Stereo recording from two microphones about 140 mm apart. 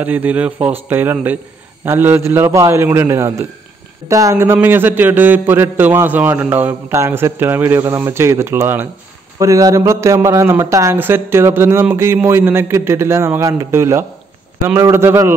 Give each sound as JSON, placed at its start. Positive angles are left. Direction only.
{"t": 0.0, "sound": "a man's voice", "side_deg": -10}